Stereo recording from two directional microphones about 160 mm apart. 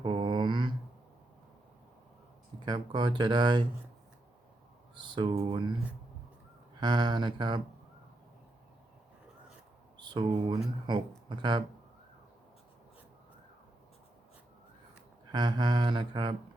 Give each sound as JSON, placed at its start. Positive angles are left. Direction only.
{"t": 0.0, "sound": "a sound", "side_deg": -35}
{"t": 2.6, "sound": "speech", "side_deg": -30}
{"t": 4.9, "sound": "speech", "side_deg": -30}
{"t": 6.7, "sound": "speech", "side_deg": -30}
{"t": 10.0, "sound": "speech", "side_deg": -30}
{"t": 15.3, "sound": "speech", "side_deg": -30}